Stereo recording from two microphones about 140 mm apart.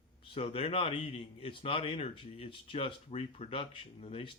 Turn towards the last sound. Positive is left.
turn(degrees=45)  # may be behind; listen again after turning